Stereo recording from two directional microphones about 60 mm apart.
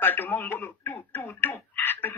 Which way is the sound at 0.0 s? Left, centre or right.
Left.